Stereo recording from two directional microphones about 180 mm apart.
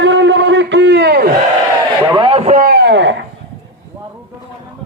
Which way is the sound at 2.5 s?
55° right (ahead or behind).